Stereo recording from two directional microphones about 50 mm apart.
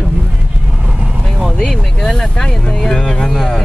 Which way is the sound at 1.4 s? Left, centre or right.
Centre.